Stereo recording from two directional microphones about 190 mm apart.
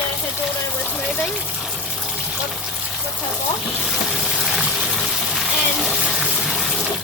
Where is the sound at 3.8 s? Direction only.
Centre (ahead or behind).